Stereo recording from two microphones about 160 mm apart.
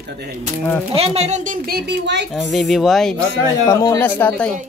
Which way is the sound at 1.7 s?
90° right.